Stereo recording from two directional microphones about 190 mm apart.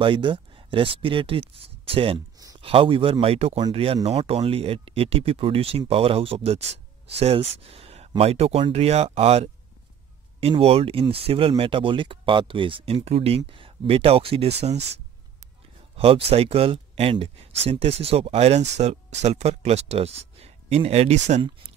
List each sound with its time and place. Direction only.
0.0 s speech: 25° right (ahead or behind)
16.3 s speech: 30° right (ahead or behind)